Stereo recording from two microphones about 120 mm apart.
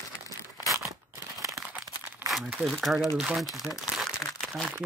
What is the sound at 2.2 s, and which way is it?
Crumpling, 15° right (ahead or behind).